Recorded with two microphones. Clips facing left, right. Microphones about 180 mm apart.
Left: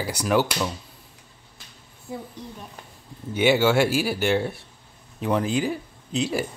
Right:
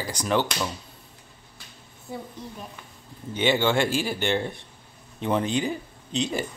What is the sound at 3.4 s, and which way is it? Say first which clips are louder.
Speech: left 3 dB; 10° left (ahead or behind).